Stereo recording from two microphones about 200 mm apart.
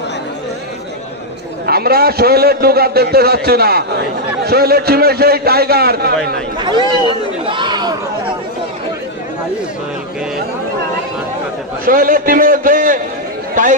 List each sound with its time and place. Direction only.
1.7 s a man's voice: 50° right (ahead or behind)
6.6 s a man's voice: 20° right (ahead or behind)
7.4 s chatter: 25° right (ahead or behind)
11.8 s a man's voice: 45° right (ahead or behind)
13.6 s a sound: 40° right (ahead or behind)